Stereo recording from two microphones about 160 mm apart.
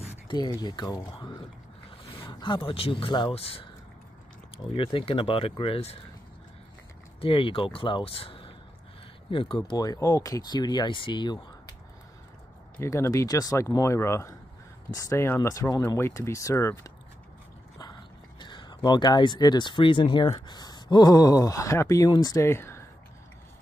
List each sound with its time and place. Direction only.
0.3 s speech: 25° left (ahead or behind)
2.1 s speech: 30° left (ahead or behind)
4.7 s speech: 35° left (ahead or behind)
7.2 s speech: 35° left (ahead or behind)
9.7 s speech: 20° left (ahead or behind)
12.7 s speech: 15° left (ahead or behind)
18.4 s speech: 30° left (ahead or behind)